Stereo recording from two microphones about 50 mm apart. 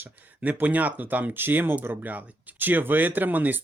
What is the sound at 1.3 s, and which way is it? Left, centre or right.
Speech, right.